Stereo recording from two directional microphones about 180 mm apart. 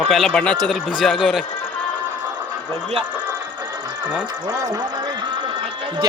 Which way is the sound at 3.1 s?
10° right (ahead or behind).